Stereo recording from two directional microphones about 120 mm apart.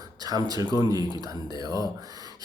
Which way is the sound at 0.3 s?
30° right (ahead or behind).